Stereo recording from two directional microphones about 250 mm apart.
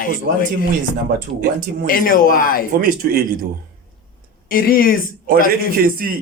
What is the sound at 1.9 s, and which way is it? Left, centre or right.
Speech, left.